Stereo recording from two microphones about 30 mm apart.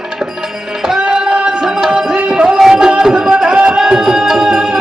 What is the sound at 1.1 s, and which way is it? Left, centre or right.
Music, right.